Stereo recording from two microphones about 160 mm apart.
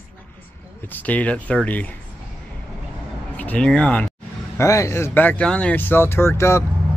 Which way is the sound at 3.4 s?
10° left (ahead or behind).